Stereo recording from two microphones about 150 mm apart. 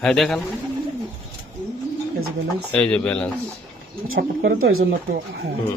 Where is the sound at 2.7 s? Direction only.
10° left (ahead or behind).